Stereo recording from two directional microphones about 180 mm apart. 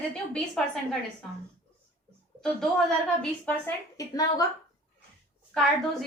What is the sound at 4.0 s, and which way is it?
Speech, 20° left (ahead or behind).